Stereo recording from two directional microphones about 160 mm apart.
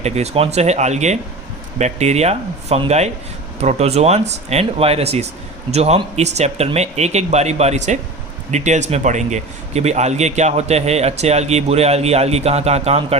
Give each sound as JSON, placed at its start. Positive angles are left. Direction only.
{"t": 0.0, "sound": "speech", "side_deg": -40}